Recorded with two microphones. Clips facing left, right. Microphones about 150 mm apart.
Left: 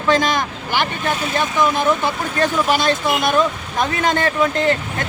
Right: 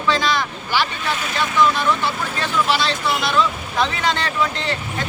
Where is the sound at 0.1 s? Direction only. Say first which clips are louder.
Left 3 dB; 45° left (ahead or behind).